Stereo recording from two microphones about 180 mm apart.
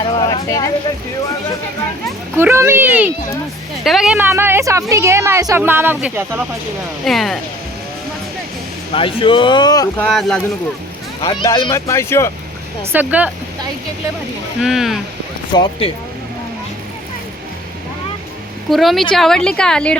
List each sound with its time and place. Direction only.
0.2 s speech: 20° left (ahead or behind)
2.3 s a woman's voice: 15° right (ahead or behind)
4.3 s a woman's voice: 15° right (ahead or behind)
7.0 s a woman's voice: centre (ahead or behind)
8.9 s speech: 30° left (ahead or behind)
10.0 s a woman's voice: 5° left (ahead or behind)
11.2 s speech: 25° left (ahead or behind)
12.8 s a woman's voice: 10° right (ahead or behind)
14.6 s a woman's voice: centre (ahead or behind)
15.5 s speech: 25° left (ahead or behind)
18.7 s a woman's voice: centre (ahead or behind)